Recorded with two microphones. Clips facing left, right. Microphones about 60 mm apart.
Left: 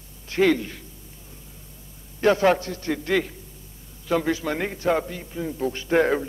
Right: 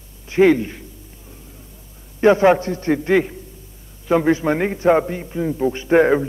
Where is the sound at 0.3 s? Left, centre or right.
Right.